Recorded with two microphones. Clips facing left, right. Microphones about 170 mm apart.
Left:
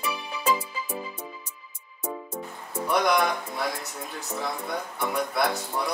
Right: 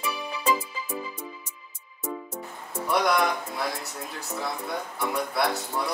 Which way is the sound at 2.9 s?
Centre (ahead or behind).